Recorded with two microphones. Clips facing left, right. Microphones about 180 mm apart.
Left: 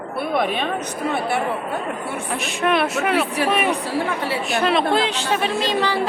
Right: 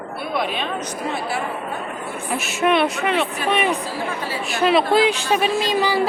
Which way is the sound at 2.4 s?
5° right (ahead or behind).